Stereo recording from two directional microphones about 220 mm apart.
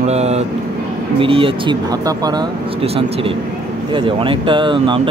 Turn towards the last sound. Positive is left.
turn(degrees=-20)  # may be behind; listen again after turning